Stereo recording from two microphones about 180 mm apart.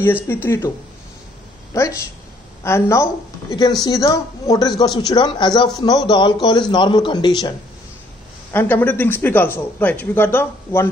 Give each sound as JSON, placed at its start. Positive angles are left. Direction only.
{"t": 0.0, "sound": "a man's voice", "side_deg": 10}
{"t": 1.7, "sound": "a woman's voice", "side_deg": 20}
{"t": 8.5, "sound": "a man's voice", "side_deg": 10}